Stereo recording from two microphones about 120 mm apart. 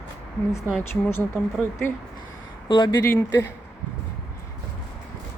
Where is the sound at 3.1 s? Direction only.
25° left (ahead or behind).